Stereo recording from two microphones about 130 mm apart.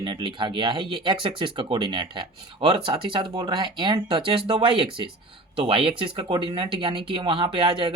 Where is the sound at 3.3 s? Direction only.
30° right (ahead or behind).